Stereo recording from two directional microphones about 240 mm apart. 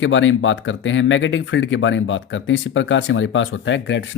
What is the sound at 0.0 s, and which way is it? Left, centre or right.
Speech, left.